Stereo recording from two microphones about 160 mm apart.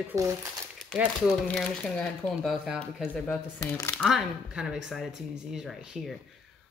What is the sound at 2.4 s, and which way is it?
Speech, 5° right (ahead or behind).